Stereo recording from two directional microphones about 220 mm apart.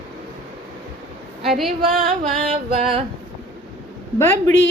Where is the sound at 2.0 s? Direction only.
25° right (ahead or behind).